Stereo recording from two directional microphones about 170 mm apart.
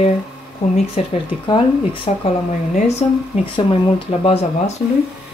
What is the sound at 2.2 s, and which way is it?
Speech, 40° left (ahead or behind).